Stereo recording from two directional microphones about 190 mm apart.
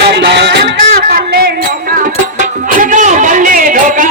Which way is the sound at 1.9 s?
45° right (ahead or behind).